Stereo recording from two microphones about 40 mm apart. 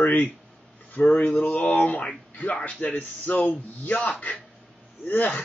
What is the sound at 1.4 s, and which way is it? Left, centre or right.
Speech, left.